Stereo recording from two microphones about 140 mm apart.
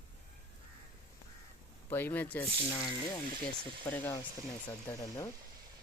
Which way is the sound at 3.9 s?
15° left (ahead or behind).